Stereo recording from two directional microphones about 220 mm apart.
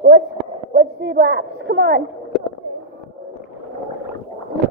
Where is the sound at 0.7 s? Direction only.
50° right (ahead or behind).